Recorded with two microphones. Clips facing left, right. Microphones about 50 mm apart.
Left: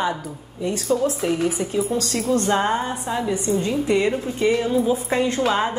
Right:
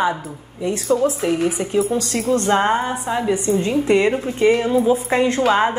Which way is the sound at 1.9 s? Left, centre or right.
Right.